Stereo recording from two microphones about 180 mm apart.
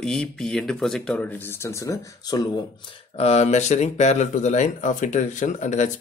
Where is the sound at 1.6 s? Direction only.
15° left (ahead or behind).